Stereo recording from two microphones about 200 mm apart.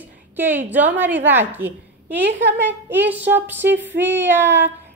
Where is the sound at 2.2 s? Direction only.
60° right (ahead or behind).